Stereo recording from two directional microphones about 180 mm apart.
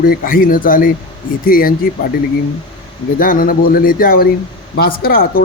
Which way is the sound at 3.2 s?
50° left (ahead or behind).